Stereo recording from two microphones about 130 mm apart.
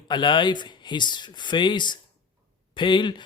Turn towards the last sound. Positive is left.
turn(degrees=35)  # may be behind; listen again after turning